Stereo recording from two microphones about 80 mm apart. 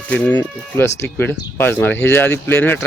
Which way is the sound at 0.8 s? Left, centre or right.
Left.